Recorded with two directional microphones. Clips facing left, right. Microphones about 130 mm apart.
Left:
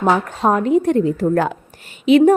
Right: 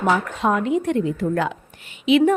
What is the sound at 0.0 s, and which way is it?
A woman's voice, 35° left (ahead or behind).